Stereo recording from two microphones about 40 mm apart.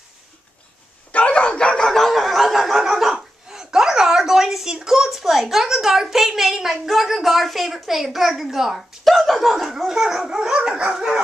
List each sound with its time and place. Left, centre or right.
1.1 s bow-wow: left
1.9 s a sound: centre
2.8 s speech: centre
9.8 s dog: centre